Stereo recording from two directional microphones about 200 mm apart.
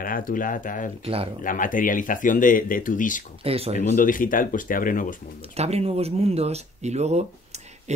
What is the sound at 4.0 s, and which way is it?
Speech, 40° left (ahead or behind).